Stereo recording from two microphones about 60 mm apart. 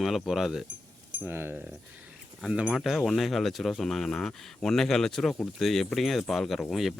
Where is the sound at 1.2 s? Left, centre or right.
Right.